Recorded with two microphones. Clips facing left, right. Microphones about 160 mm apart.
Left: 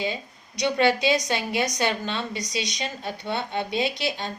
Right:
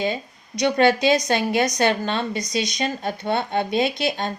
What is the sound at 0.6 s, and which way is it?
A woman's voice, 50° right (ahead or behind).